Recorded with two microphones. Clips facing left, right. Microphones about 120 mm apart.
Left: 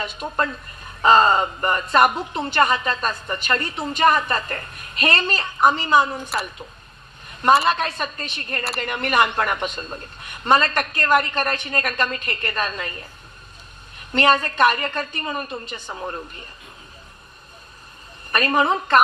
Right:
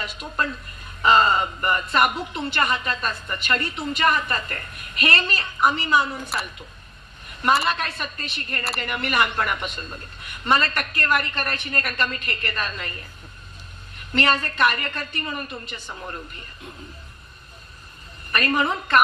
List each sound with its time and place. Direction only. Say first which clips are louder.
0.0 s a woman's voice: left 3 dB; 30° left (ahead or behind)
7.6 s a woman's voice: left 4 dB; 30° left (ahead or behind)
14.1 s a woman's voice: left 4 dB; 30° left (ahead or behind)
18.3 s a woman's voice: left 3 dB; 30° left (ahead or behind)